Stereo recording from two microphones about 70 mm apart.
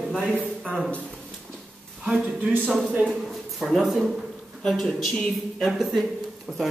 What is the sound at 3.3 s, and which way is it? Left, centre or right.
Speech, centre.